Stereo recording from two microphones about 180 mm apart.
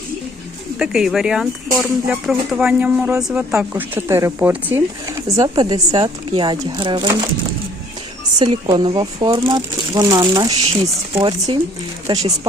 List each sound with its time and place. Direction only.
0.8 s speech: 5° right (ahead or behind); by 7.1 s 25° right (ahead or behind)
8.4 s speech: 25° right (ahead or behind)